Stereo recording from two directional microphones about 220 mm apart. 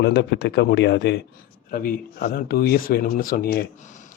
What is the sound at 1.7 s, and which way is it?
Speech, 40° left (ahead or behind).